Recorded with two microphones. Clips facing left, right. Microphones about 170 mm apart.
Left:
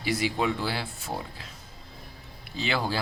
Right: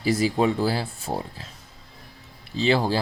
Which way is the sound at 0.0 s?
35° right (ahead or behind).